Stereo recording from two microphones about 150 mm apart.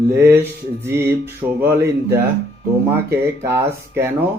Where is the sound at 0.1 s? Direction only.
15° right (ahead or behind).